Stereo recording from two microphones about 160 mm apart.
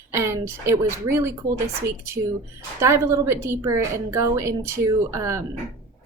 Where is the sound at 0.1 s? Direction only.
15° right (ahead or behind).